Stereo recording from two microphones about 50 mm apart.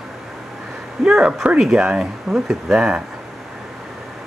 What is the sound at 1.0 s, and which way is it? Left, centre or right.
Speech, centre.